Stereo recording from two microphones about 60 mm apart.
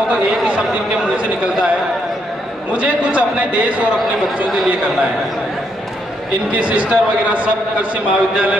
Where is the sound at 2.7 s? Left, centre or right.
Right.